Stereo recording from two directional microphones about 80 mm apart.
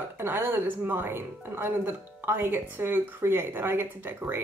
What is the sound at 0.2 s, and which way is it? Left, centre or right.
Speech, right.